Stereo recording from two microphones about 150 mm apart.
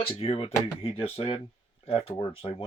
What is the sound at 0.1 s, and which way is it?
Speech, 40° left (ahead or behind).